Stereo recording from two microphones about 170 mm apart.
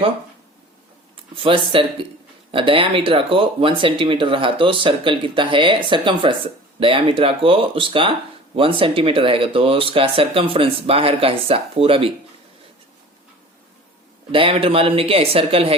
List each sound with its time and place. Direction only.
1.1 s speech: 30° right (ahead or behind)
14.3 s speech: 30° right (ahead or behind)